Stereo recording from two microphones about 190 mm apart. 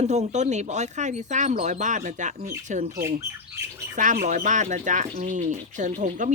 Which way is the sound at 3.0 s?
15° right (ahead or behind).